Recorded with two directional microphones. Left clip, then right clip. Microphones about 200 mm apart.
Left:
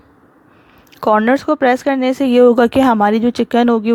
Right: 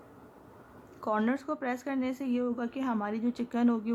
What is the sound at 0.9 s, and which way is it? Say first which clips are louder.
Speech: left 18 dB; 40° left (ahead or behind).